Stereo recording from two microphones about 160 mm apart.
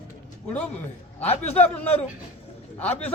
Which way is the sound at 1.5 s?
10° left (ahead or behind).